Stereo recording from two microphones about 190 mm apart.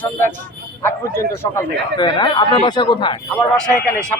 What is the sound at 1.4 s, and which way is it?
Speech, 15° left (ahead or behind).